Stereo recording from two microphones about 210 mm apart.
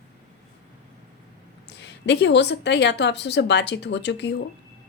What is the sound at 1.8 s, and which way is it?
A woman's voice, 55° left (ahead or behind).